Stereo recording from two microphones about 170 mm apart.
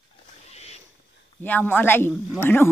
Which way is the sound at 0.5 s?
40° left (ahead or behind).